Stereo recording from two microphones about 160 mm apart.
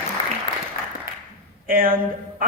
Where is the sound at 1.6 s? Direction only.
65° right (ahead or behind).